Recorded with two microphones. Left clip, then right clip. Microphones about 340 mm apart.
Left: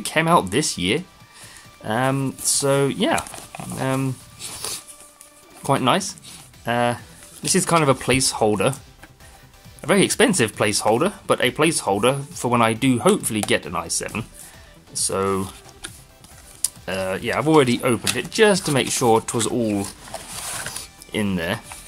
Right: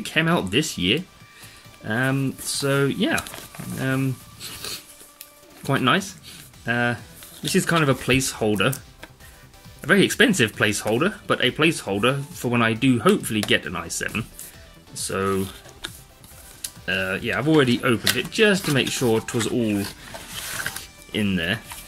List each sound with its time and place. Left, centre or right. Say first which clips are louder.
0.0 s speech: left 4 dB; centre
3.8 s writing: left 2 dB; centre
5.7 s speech: left 2 dB; centre
9.8 s speech: even; centre
15.8 s music: right 3 dB; centre
16.6 s speech: even; centre
19.4 s speech: left 1 dB; left
21.1 s speech: even; centre